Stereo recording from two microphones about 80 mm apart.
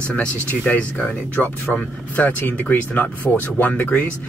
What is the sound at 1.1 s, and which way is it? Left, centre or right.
Speech, left.